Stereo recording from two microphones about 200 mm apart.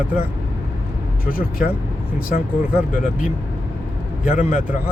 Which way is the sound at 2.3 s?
45° left (ahead or behind).